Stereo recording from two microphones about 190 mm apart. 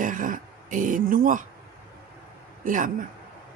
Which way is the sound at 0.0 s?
45° right (ahead or behind).